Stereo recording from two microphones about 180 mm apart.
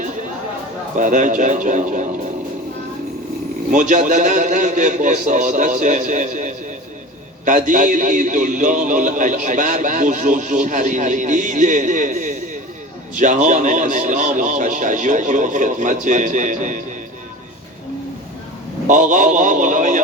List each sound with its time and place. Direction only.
0.9 s a man's voice: 45° right (ahead or behind)
3.7 s a man's voice: 45° right (ahead or behind)
18.9 s a man's voice: 45° right (ahead or behind)